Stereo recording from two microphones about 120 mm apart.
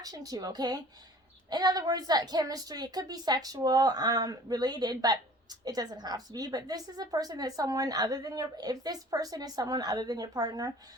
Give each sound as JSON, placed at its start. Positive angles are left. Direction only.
{"t": 0.0, "sound": "a woman's voice", "side_deg": -30}